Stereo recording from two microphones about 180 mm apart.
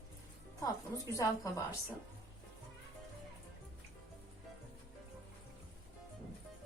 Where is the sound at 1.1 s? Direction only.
15° left (ahead or behind).